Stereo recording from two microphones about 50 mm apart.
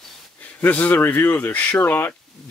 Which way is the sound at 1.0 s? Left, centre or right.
Left.